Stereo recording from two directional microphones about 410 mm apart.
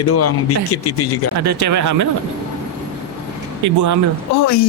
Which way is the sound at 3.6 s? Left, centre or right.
Right.